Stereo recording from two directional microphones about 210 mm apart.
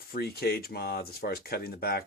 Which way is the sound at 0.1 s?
50° left (ahead or behind).